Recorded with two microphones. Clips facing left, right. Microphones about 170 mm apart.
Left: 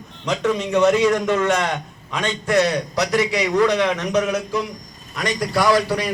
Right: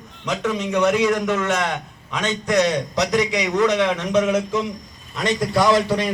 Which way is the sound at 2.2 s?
20° right (ahead or behind).